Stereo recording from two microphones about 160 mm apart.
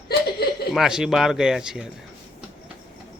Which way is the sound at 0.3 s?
80° left.